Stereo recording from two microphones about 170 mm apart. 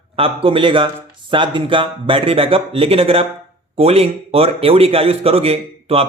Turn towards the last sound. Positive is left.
turn(degrees=-35)  # may be behind; listen again after turning